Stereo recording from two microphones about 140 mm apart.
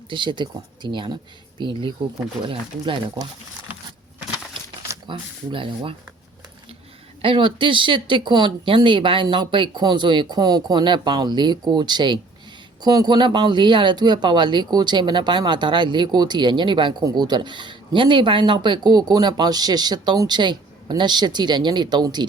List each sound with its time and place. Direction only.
0.1 s speech: 35° right (ahead or behind)
5.0 s speech: 40° right (ahead or behind)
7.2 s speech: 40° right (ahead or behind)